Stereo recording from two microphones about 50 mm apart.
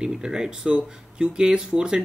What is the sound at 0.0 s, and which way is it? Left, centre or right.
Speech, centre.